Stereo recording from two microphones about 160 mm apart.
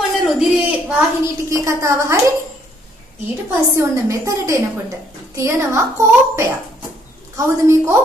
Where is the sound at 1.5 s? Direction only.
20° right (ahead or behind).